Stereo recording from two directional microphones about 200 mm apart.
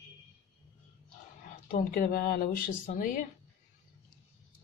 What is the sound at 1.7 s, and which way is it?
Speech, 45° left (ahead or behind).